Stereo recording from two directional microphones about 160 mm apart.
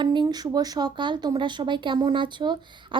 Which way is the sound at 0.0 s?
30° right (ahead or behind).